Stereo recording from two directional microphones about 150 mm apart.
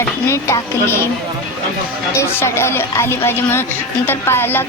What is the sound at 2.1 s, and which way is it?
A woman's voice, 20° left (ahead or behind).